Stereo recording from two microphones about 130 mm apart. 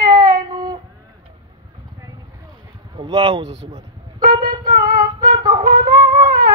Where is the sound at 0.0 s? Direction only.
30° right (ahead or behind).